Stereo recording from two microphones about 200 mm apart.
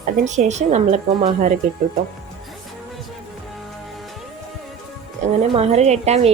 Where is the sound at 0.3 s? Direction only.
35° right (ahead or behind).